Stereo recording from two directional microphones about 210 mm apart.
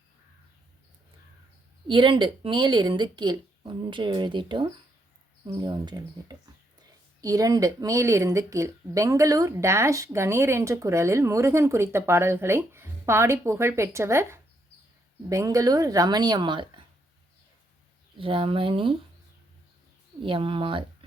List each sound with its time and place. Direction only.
1.9 s a woman's voice: 25° right (ahead or behind)
18.2 s a woman's voice: 25° right (ahead or behind)
20.2 s a woman's voice: 25° right (ahead or behind)